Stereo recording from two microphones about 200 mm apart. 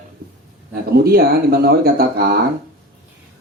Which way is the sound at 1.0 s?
50° right (ahead or behind).